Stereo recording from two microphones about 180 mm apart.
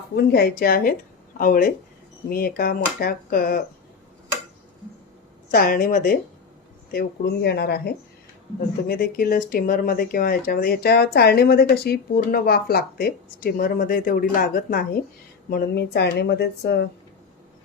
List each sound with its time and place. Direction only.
0.2 s speech: 60° left (ahead or behind)
5.5 s speech: 55° left (ahead or behind)
6.9 s speech: 65° left (ahead or behind)